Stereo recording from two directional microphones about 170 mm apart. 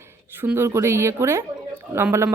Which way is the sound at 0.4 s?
15° right (ahead or behind).